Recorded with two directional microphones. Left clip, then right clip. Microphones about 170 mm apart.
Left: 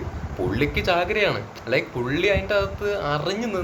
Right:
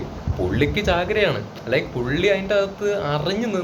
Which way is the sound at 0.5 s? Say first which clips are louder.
Right 1 dB; 10° left (ahead or behind).